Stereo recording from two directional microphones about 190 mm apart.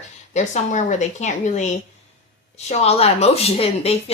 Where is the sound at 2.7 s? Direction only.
35° left (ahead or behind).